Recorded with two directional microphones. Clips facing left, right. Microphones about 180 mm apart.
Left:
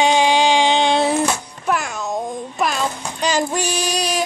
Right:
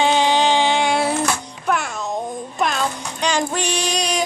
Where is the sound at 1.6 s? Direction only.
Centre (ahead or behind).